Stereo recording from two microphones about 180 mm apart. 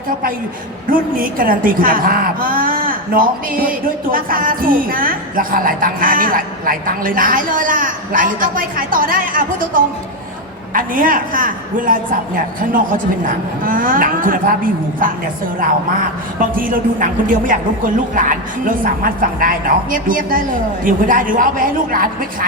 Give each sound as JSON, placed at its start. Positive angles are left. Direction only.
{"t": 0.9, "sound": "a woman's voice", "side_deg": -50}
{"t": 16.4, "sound": "a woman's voice", "side_deg": -50}